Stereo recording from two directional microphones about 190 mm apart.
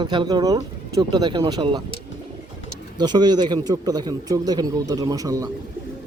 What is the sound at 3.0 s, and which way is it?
Speech, 20° right (ahead or behind).